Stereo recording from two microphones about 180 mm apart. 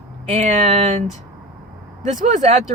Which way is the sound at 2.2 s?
40° right (ahead or behind).